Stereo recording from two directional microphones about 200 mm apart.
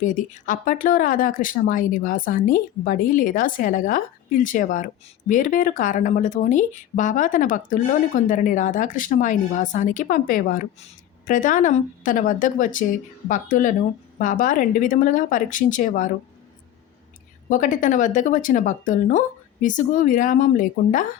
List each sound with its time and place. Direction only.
0.0 s speech: 40° left (ahead or behind)
17.5 s speech: 40° left (ahead or behind)